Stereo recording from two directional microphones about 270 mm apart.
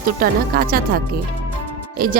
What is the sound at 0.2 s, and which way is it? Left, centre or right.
Speech, right.